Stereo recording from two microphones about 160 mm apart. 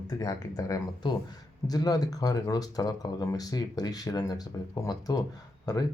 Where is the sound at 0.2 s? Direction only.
20° left (ahead or behind).